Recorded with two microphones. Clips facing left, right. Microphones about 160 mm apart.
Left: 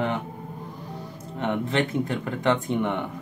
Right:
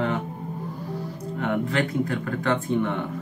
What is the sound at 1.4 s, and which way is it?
Speech, 25° left (ahead or behind).